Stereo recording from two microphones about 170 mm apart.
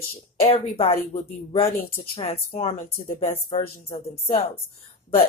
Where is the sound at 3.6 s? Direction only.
60° left (ahead or behind).